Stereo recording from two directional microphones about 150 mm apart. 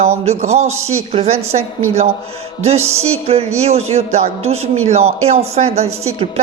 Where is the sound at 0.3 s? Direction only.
45° right (ahead or behind).